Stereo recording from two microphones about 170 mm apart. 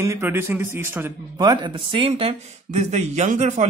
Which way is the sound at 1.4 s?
25° right (ahead or behind).